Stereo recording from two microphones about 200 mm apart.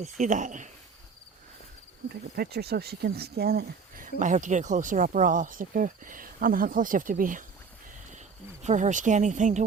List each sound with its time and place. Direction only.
0.0 s speech: 40° right (ahead or behind)
2.0 s speech: 50° right (ahead or behind)
8.6 s speech: 40° right (ahead or behind)